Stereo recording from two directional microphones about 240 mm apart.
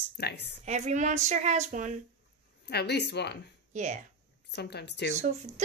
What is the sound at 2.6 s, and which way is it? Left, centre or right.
Speech, left.